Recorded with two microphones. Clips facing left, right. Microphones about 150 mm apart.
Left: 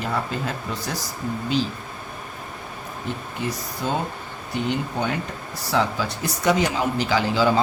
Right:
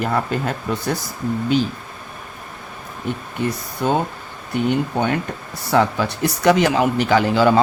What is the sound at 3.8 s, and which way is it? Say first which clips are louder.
A man's voice: right 6 dB; 55° right (ahead or behind).